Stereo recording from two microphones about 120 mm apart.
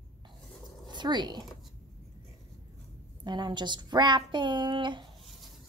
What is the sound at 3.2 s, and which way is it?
Speech, 40° right (ahead or behind).